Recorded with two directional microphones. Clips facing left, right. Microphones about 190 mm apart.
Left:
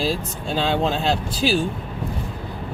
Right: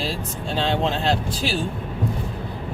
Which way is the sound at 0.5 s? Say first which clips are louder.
Left 1 dB; 5° left (ahead or behind).